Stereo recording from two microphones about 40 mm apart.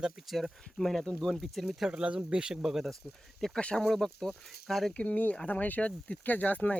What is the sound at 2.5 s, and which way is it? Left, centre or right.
Speech, centre.